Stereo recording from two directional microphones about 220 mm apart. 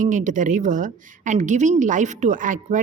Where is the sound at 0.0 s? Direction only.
35° right (ahead or behind).